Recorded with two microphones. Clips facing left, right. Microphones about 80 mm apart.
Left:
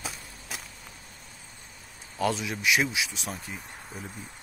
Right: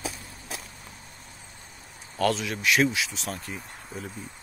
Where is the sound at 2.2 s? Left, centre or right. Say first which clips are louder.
Right 2 dB; centre.